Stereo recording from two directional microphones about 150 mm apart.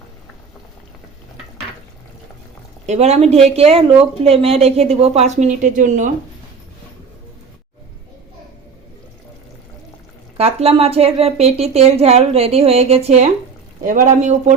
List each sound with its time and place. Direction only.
2.8 s a woman's voice: 50° right (ahead or behind)
10.3 s speech: 40° right (ahead or behind)
13.8 s speech: 60° right (ahead or behind)